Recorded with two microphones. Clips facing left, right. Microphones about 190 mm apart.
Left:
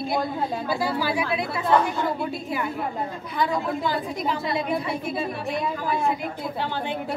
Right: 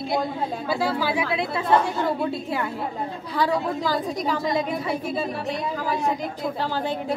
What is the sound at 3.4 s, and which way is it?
A woman's voice, 40° right (ahead or behind).